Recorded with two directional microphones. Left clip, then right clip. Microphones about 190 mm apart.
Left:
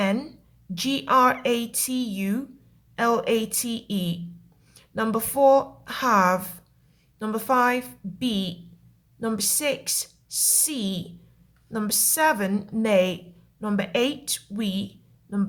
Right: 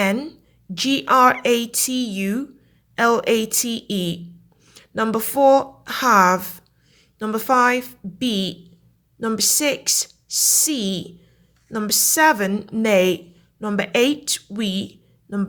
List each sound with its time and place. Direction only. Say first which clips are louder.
0.2 s a woman's voice: right 5 dB; 15° right (ahead or behind)
12.8 s a woman's voice: right 4 dB; 25° right (ahead or behind)